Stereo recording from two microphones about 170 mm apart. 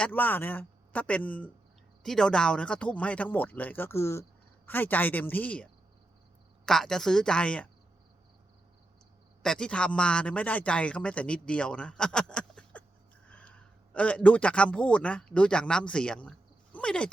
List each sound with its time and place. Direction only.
0.0 s speech: 10° left (ahead or behind)
6.7 s speech: 5° left (ahead or behind)
9.4 s speech: 5° left (ahead or behind)
13.2 s a sound: 5° left (ahead or behind)
13.9 s speech: 5° left (ahead or behind)
16.7 s a sound: 5° left (ahead or behind)